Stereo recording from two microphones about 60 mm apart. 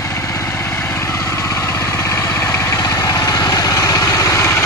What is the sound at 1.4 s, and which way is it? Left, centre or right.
Vehicle, left.